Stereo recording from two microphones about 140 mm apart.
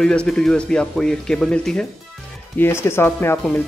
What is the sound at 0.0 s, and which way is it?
Speech, 5° left (ahead or behind).